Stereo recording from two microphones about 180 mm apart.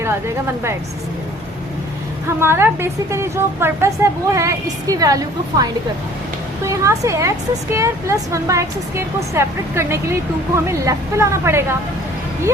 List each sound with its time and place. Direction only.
0.0 s speech: 15° right (ahead or behind)
2.2 s speech: 15° right (ahead or behind)
6.7 s speech: 15° right (ahead or behind)